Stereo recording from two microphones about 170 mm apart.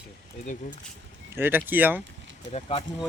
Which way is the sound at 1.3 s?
10° right (ahead or behind).